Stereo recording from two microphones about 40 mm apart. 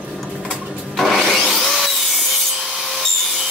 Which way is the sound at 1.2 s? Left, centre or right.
Centre.